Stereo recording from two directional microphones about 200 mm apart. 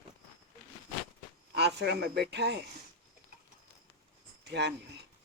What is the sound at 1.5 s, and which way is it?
Speech, 55° right (ahead or behind).